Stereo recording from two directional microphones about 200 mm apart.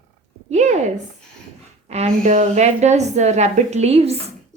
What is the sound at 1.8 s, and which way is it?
A woman's voice, 30° right (ahead or behind).